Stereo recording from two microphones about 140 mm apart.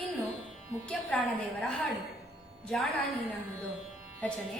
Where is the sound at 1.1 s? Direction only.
10° left (ahead or behind).